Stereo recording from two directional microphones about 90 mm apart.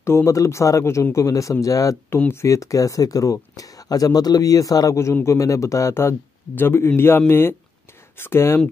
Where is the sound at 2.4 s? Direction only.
35° left (ahead or behind).